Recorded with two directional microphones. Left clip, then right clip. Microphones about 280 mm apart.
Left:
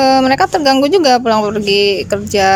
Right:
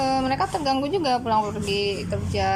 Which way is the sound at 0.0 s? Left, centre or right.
Left.